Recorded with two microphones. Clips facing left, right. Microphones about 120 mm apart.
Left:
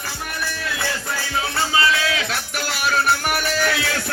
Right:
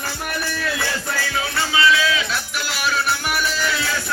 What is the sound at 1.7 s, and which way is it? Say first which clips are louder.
Music: right 3 dB; 35° left (ahead or behind).